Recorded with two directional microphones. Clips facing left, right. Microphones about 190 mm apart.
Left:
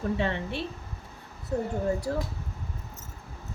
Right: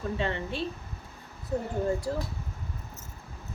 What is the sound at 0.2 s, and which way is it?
Speech, 65° left (ahead or behind).